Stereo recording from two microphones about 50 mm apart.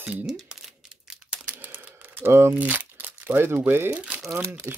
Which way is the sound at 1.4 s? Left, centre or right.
Right.